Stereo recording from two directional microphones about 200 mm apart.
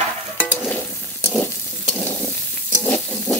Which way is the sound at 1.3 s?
5° left (ahead or behind).